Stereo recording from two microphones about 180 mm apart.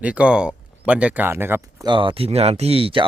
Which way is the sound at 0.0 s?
5° right (ahead or behind).